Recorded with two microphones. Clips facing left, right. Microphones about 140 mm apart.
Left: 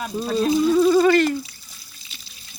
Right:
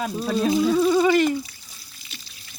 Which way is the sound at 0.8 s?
10° right (ahead or behind).